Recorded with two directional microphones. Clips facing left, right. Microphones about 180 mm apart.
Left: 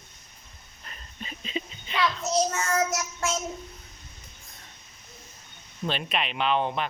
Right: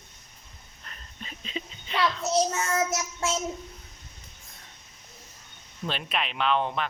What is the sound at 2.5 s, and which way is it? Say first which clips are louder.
Child singing: left 1 dB; 25° right (ahead or behind).